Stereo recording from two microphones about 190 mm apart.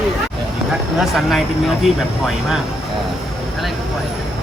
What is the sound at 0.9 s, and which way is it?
Speech, centre (ahead or behind).